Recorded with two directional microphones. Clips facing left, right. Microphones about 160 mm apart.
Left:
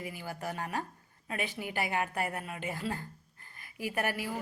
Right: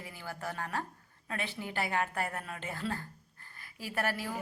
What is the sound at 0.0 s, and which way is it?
A woman's voice, 15° left (ahead or behind).